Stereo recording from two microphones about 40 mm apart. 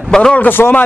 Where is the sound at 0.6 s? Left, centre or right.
Left.